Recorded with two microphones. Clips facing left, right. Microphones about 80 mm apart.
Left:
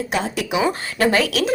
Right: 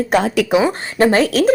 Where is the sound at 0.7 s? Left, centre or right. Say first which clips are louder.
Right 4 dB; right.